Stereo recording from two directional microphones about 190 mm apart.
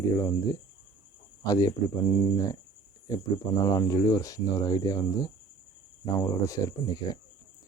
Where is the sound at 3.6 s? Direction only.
20° left (ahead or behind).